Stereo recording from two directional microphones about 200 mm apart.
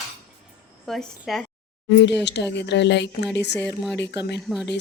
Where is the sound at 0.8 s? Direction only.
Centre (ahead or behind).